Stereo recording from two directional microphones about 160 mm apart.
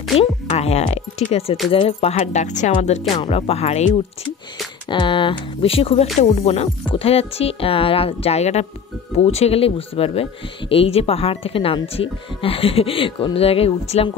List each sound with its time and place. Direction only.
0.2 s speech: 40° left (ahead or behind)
4.8 s speech: 30° left (ahead or behind)